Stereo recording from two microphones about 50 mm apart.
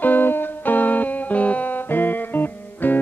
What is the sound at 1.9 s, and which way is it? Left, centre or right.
Music, left.